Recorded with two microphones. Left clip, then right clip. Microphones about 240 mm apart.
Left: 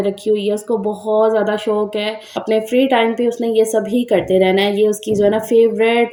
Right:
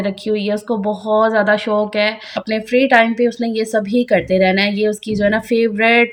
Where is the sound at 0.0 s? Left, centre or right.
Right.